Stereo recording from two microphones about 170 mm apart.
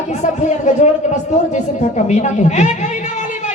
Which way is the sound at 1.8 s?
45° left (ahead or behind).